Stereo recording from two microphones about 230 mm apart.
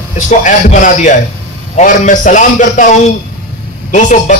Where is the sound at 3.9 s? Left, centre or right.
Left.